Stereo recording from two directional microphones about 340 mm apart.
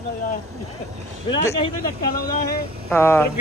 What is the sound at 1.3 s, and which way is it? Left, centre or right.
Speech, centre.